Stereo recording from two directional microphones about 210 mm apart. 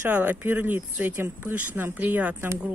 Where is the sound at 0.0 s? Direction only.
10° right (ahead or behind).